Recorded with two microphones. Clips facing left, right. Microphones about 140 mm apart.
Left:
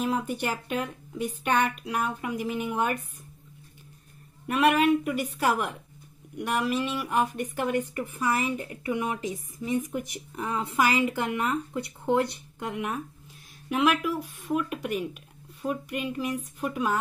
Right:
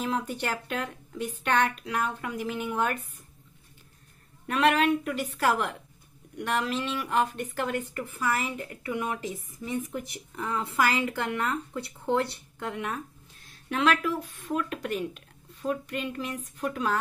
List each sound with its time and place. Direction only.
0.0 s speech: 10° left (ahead or behind)
4.5 s speech: 10° left (ahead or behind)